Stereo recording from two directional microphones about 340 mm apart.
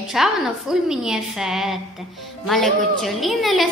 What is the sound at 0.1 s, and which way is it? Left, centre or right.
A woman's voice, centre.